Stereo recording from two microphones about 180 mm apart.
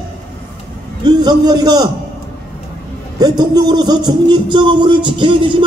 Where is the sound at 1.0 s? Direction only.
25° right (ahead or behind).